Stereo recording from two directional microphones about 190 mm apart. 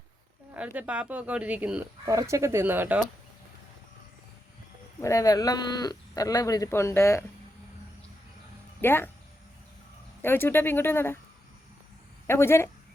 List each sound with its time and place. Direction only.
0.5 s speech: 10° right (ahead or behind)
4.9 s speech: 15° left (ahead or behind)
8.8 s speech: 10° left (ahead or behind)
10.2 s speech: 10° left (ahead or behind)
12.3 s speech: 15° left (ahead or behind)